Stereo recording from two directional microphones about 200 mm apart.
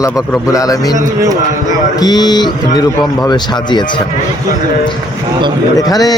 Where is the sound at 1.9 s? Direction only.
20° left (ahead or behind).